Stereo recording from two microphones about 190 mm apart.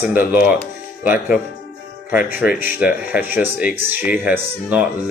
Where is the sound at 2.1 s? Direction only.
5° right (ahead or behind).